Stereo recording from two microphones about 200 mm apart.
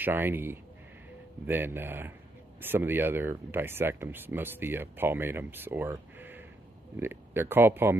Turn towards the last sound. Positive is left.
turn(degrees=-10)  # may be behind; listen again after turning